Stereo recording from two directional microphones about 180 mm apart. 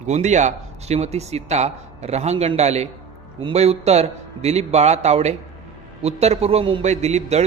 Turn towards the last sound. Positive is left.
turn(degrees=-40)  # may be behind; listen again after turning